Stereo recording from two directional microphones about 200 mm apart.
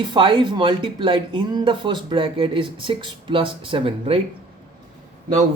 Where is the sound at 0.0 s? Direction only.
25° right (ahead or behind).